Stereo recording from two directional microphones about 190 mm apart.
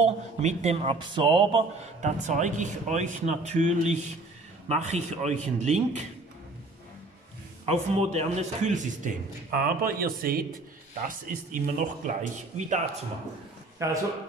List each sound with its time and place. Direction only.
0.0 s speech: 35° right (ahead or behind)
2.0 s speech: 40° right (ahead or behind)
7.6 s a man's voice: 30° right (ahead or behind)
13.8 s a man's voice: 15° right (ahead or behind)